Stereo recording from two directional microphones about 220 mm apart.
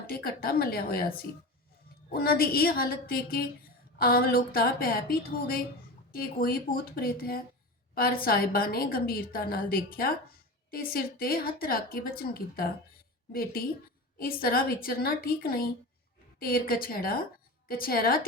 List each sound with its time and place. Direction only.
0.1 s a woman's voice: 40° left (ahead or behind)
2.0 s a woman's voice: 40° left (ahead or behind)